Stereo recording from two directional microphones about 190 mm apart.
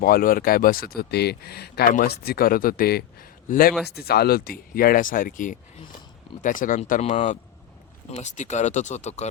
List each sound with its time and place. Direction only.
0.0 s speech: 50° left (ahead or behind)